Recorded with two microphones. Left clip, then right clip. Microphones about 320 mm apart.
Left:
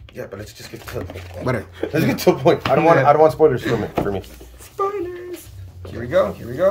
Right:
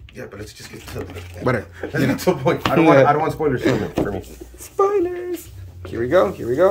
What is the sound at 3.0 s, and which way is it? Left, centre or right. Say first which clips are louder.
Speech: left 5 dB; left.